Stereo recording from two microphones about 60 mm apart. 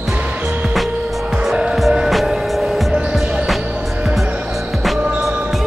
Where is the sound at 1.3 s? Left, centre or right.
Centre.